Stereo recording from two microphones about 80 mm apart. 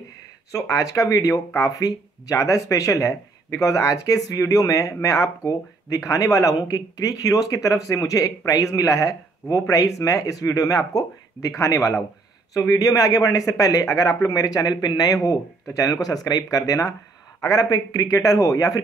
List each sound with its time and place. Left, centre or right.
0.5 s speech: left
15.1 s speech: left
18.1 s speech: left